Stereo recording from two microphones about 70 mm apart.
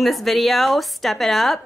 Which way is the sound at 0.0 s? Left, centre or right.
Centre.